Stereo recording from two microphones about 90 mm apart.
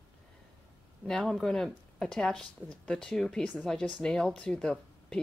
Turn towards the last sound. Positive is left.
turn(degrees=5)  # may be behind; listen again after turning